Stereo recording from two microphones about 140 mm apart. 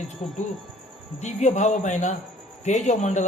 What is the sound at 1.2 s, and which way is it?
Speech, 55° left (ahead or behind).